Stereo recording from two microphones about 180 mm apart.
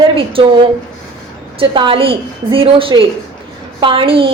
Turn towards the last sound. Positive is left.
turn(degrees=-30)  # may be behind; listen again after turning